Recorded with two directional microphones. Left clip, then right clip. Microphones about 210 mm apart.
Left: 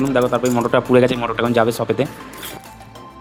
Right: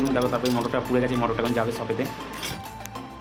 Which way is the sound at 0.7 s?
45° left (ahead or behind).